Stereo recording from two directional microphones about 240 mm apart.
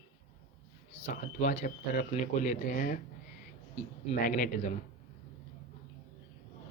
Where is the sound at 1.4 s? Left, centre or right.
Left.